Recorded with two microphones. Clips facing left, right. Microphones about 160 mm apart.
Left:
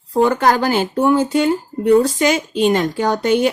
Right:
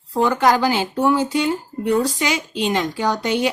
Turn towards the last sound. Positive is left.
turn(degrees=50)  # may be behind; listen again after turning